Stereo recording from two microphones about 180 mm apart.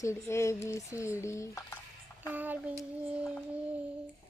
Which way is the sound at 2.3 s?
10° right (ahead or behind).